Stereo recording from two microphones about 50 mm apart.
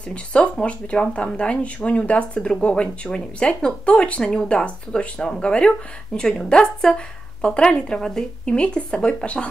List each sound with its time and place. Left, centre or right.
0.1 s speech: left
2.4 s a woman's voice: centre